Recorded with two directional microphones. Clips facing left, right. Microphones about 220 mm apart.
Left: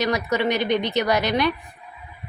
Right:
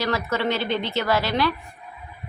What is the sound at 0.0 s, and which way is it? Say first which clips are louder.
A woman's voice: left 2 dB; 15° left (ahead or behind).